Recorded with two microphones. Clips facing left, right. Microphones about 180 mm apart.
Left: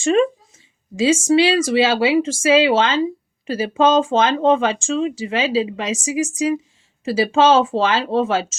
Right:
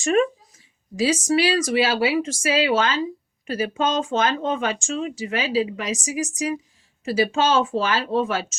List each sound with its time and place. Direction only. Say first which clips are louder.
0.0 s speech: left 3 dB; 30° left (ahead or behind)